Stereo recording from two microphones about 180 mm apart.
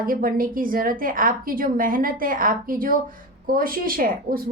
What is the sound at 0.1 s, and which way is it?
A woman's voice, 50° right (ahead or behind).